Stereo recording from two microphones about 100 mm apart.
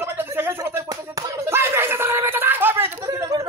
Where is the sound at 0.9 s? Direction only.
35° right (ahead or behind).